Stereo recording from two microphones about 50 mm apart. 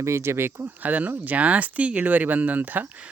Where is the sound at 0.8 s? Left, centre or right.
Right.